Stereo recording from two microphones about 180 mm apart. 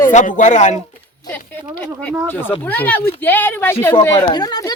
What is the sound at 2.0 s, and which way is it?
Speech, 10° left (ahead or behind).